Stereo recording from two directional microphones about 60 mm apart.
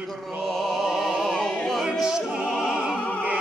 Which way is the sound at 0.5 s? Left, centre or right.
Centre.